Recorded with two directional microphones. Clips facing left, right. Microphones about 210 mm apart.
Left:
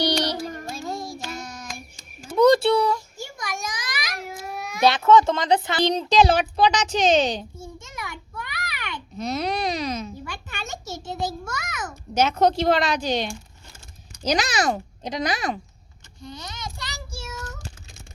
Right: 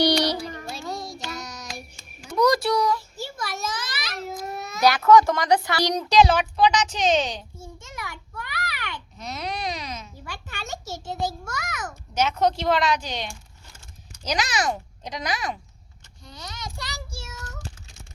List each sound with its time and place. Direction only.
0.0 s music: 10° right (ahead or behind)
0.4 s child singing: 45° left (ahead or behind)
2.4 s a sound: 30° left (ahead or behind)
3.2 s a sound: 15° left (ahead or behind)
4.8 s a child's voice: 25° left (ahead or behind)
7.8 s a sound: 20° left (ahead or behind)
9.1 s a child's voice: 35° left (ahead or behind)
10.2 s a child's voice: 20° left (ahead or behind)
16.2 s child singing: 25° left (ahead or behind)